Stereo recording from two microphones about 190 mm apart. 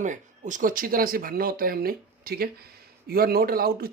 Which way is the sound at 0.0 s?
40° right (ahead or behind).